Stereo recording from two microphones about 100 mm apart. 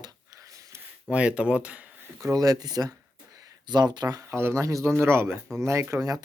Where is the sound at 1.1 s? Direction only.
10° right (ahead or behind).